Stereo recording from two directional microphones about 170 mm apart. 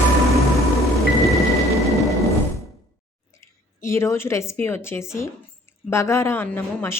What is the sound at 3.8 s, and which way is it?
Speech, 15° left (ahead or behind).